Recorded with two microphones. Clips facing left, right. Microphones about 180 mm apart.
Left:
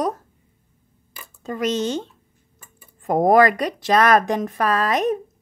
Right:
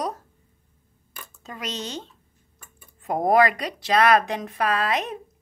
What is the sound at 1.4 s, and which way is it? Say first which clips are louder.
Speech: left 11 dB; 50° left (ahead or behind).